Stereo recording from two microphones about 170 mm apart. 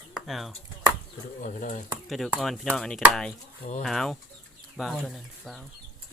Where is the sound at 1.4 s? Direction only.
50° left (ahead or behind).